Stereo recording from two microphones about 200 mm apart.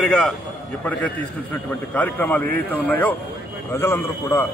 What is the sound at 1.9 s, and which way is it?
A man's voice, 10° left (ahead or behind).